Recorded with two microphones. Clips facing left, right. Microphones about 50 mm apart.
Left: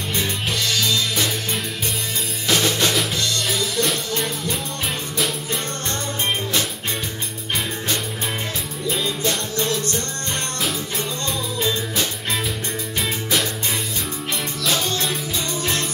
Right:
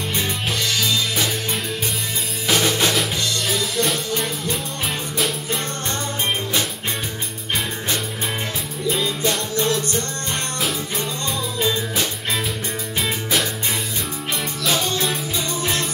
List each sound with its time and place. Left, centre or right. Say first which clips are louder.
0.5 s music: even; centre
5.1 s music: right 1 dB; centre
8.8 s music: right 2 dB; centre
14.6 s music: right 1 dB; centre